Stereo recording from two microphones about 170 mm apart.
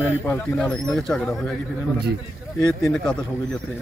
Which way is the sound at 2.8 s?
5° left (ahead or behind).